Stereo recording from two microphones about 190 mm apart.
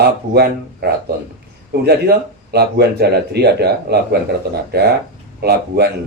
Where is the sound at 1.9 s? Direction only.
55° right (ahead or behind).